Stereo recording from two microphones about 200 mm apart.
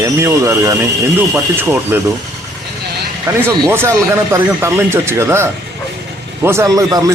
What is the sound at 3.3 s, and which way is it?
Speech, 10° right (ahead or behind).